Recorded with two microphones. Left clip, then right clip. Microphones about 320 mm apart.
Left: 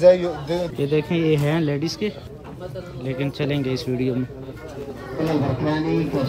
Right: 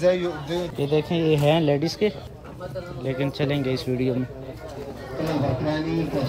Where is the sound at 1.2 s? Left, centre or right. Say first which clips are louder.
Right 1 dB; centre.